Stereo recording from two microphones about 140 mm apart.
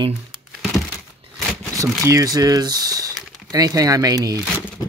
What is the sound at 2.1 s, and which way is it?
Speech, 25° right (ahead or behind).